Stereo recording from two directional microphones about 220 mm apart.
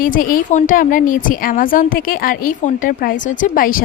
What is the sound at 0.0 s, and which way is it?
A woman's voice, 40° left (ahead or behind).